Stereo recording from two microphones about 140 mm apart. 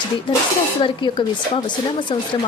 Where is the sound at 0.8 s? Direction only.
35° left (ahead or behind).